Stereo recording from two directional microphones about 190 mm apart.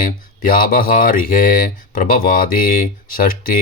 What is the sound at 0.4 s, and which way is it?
Speech, 45° left (ahead or behind).